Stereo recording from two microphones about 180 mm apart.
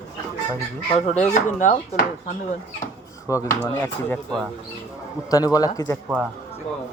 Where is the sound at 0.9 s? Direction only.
40° left (ahead or behind).